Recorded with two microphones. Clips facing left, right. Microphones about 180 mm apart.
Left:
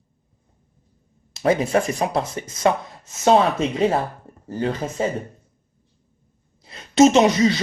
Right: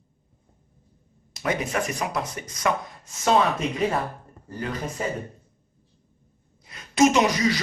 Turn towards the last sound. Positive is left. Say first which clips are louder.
# left 5 dB
turn(degrees=25)  # may be behind; listen again after turning